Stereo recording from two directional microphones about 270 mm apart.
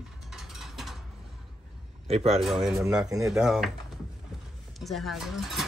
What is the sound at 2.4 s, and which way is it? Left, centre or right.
Speech, centre.